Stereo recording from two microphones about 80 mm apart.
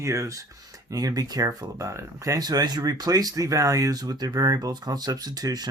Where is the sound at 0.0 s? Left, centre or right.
Right.